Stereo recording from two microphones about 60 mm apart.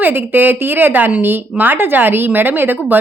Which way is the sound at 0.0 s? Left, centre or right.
Right.